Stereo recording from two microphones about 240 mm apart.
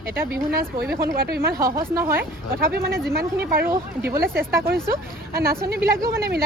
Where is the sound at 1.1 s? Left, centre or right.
Right.